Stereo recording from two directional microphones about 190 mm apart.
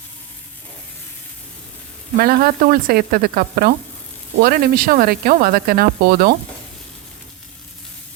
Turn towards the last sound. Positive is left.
turn(degrees=-50)  # may be behind; listen again after turning